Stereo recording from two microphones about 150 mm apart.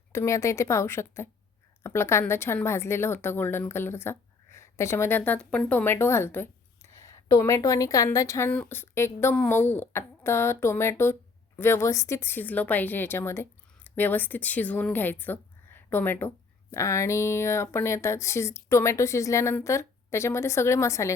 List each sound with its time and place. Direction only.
0.1 s a woman's voice: 20° left (ahead or behind)